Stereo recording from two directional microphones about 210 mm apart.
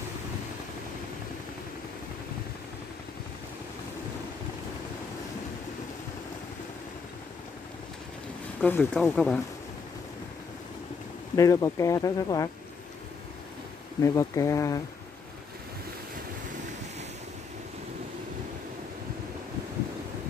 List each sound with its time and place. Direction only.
8.5 s speech: 5° left (ahead or behind)
11.3 s speech: 15° left (ahead or behind)
14.0 s speech: 15° left (ahead or behind)